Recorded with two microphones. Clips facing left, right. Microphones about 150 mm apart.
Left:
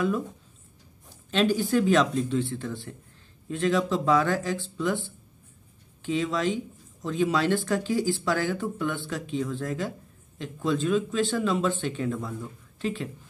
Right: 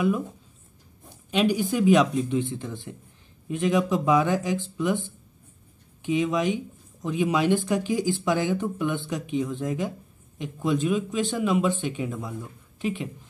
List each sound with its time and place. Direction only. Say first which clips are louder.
1.3 s speech: even; 15° right (ahead or behind)